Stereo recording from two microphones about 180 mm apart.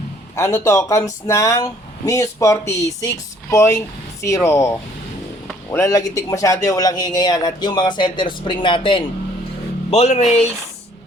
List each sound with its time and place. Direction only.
0.3 s speech: 15° left (ahead or behind)
5.8 s speech: 20° left (ahead or behind); by 10.5 s 35° left (ahead or behind)